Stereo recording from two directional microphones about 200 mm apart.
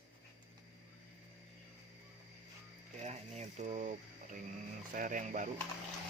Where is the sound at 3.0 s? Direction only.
35° right (ahead or behind).